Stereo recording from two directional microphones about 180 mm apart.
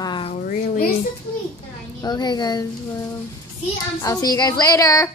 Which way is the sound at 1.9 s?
25° left (ahead or behind).